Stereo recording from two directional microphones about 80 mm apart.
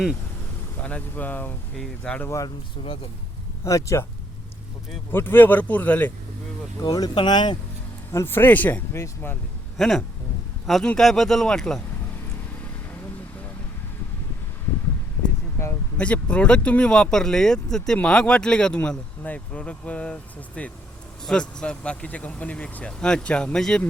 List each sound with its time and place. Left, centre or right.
0.8 s speech: centre
1.7 s speech: centre
3.6 s speech: left
5.1 s speech: left
6.8 s speech: left
7.1 s speech: left
8.1 s speech: left
9.7 s speech: centre
16.0 s speech: centre